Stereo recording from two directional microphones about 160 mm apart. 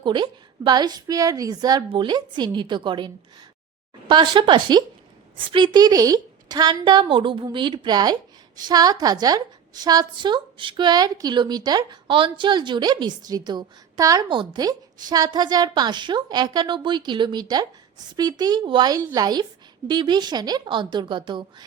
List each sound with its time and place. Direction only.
0.0 s a woman's voice: 30° right (ahead or behind)
4.1 s a woman's voice: 30° right (ahead or behind)